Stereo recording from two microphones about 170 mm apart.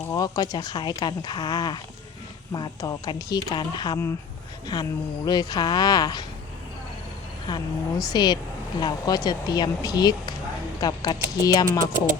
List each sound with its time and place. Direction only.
0.0 s speech: 20° left (ahead or behind)
7.4 s speech: 25° left (ahead or behind)